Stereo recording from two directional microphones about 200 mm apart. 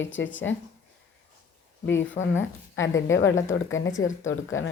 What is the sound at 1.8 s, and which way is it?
Speech, 65° left (ahead or behind).